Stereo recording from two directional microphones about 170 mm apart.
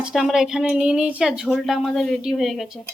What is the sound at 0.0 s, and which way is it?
A woman's voice, centre (ahead or behind).